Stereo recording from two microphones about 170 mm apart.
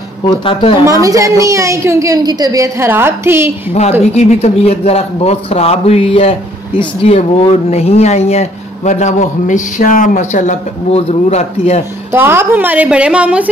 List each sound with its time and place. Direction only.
0.3 s speech: 30° left (ahead or behind)
1.0 s a woman's voice: 20° right (ahead or behind)
4.1 s speech: 40° left (ahead or behind)
12.1 s a woman's voice: 15° right (ahead or behind)